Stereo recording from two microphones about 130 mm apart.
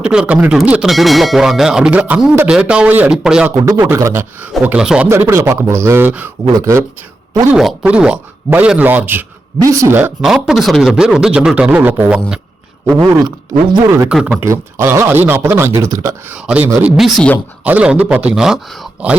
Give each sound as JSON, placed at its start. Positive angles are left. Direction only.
{"t": 0.0, "sound": "a man's voice", "side_deg": -5}
{"t": 3.8, "sound": "a man's voice", "side_deg": -20}
{"t": 5.0, "sound": "speech", "side_deg": -20}
{"t": 6.4, "sound": "speech", "side_deg": -25}
{"t": 7.5, "sound": "a man's voice", "side_deg": -5}
{"t": 10.2, "sound": "speech", "side_deg": 0}
{"t": 13.0, "sound": "speech", "side_deg": -30}
{"t": 14.1, "sound": "speech", "side_deg": -5}
{"t": 14.4, "sound": "speech", "side_deg": -20}
{"t": 16.3, "sound": "a man's voice", "side_deg": -10}